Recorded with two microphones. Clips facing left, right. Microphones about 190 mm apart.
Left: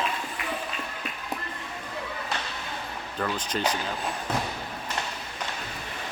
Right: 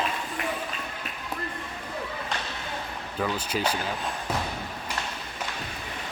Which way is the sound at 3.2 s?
5° right (ahead or behind).